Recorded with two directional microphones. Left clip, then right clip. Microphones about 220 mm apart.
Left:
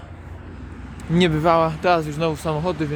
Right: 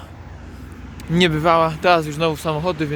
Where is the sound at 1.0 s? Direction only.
5° left (ahead or behind).